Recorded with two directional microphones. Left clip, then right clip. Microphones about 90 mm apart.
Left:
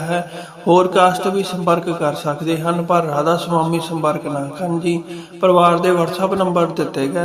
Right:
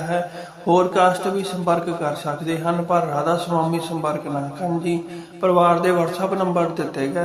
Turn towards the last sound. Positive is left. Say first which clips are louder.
# left 4 dB
turn(degrees=45)  # may be behind; listen again after turning